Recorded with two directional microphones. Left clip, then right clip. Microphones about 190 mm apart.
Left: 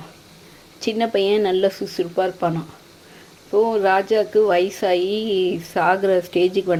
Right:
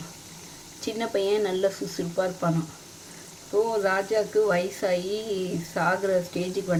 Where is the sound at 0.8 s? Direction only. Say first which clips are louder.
Left 7 dB; 25° left (ahead or behind).